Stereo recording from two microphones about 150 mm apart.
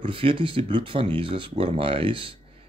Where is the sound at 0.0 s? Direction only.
35° right (ahead or behind).